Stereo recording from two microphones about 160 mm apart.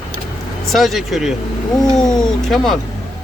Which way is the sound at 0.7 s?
Centre (ahead or behind).